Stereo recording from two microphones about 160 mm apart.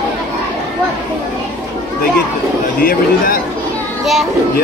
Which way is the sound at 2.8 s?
65° left (ahead or behind).